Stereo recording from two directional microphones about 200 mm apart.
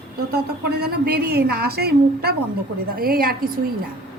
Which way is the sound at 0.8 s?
50° right (ahead or behind).